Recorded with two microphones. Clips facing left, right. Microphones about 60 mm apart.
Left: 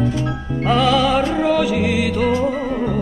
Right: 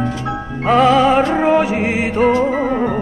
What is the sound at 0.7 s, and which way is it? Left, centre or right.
Music, right.